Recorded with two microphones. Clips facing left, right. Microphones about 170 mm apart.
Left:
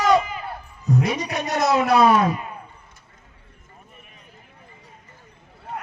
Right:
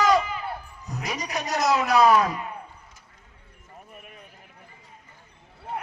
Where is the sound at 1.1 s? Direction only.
30° left (ahead or behind).